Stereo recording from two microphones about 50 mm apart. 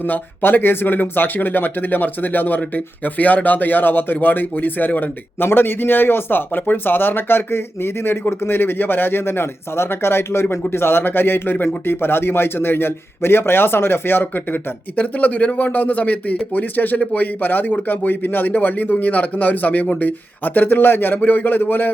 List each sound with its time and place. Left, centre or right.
0.0 s a man's voice: left
14.9 s a man's voice: left
17.0 s speech: left
17.4 s a man's voice: left